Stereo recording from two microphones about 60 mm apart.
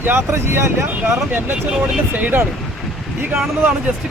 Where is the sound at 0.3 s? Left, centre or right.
Right.